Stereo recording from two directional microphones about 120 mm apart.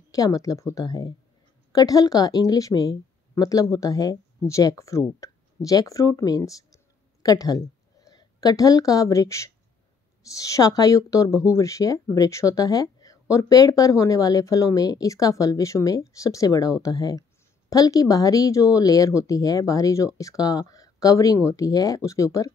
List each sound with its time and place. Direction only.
0.1 s a woman's voice: 30° left (ahead or behind)